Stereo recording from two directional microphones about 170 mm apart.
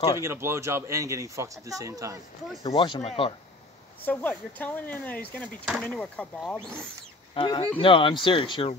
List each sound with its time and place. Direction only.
0.2 s speech: 15° right (ahead or behind)
2.6 s speech: 30° left (ahead or behind)
4.0 s speech: 10° left (ahead or behind)
7.3 s speech: 25° left (ahead or behind)